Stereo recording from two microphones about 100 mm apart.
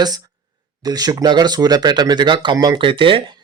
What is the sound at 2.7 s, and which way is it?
Speech, 55° right (ahead or behind).